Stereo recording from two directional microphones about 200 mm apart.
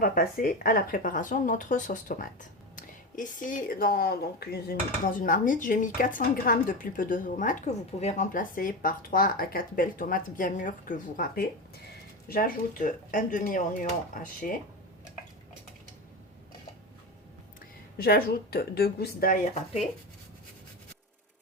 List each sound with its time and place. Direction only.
0.0 s speech: 45° left (ahead or behind)
17.9 s speech: 50° left (ahead or behind)